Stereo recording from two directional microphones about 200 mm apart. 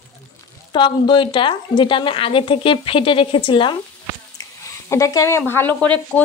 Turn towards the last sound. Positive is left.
turn(degrees=5)  # may be behind; listen again after turning